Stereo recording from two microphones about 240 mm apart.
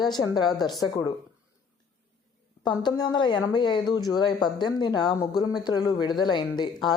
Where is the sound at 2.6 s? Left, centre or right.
Centre.